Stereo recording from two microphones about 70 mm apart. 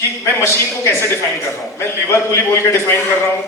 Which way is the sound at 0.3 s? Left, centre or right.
Left.